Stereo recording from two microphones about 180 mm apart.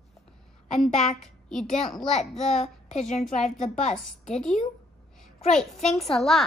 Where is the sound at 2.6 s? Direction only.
40° left (ahead or behind).